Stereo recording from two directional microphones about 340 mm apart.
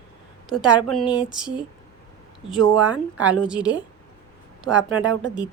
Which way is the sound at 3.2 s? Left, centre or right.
Centre.